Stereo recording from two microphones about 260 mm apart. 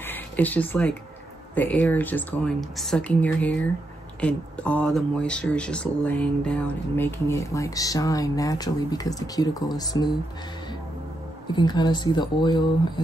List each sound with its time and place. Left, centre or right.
0.0 s a sound: centre
1.5 s speech: centre
11.5 s speech: centre